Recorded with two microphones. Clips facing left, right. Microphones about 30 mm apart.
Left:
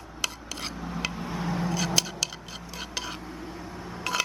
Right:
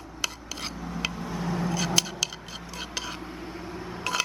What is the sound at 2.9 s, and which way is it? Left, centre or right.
Dishes, centre.